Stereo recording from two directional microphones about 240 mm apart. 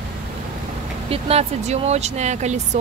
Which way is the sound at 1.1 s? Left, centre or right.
Right.